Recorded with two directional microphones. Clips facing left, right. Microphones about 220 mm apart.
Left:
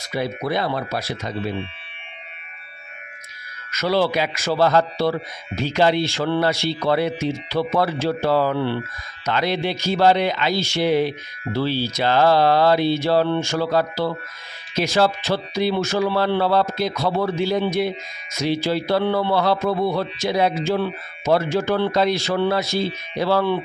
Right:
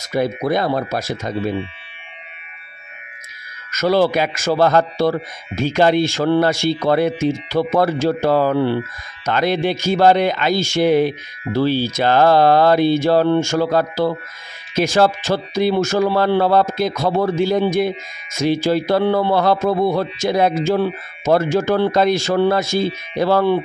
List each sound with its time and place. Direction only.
0.0 s speech: 45° right (ahead or behind)
3.7 s speech: 45° right (ahead or behind)